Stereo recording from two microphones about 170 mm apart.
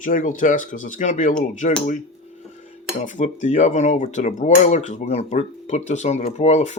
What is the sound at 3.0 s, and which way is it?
Cutlery, 45° left (ahead or behind).